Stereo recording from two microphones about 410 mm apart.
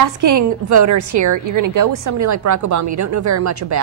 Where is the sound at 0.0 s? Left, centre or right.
Right.